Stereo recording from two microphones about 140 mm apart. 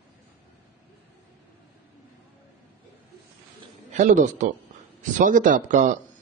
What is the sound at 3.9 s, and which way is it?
A man's voice, 65° right (ahead or behind).